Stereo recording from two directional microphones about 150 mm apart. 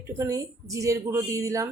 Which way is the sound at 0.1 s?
20° right (ahead or behind).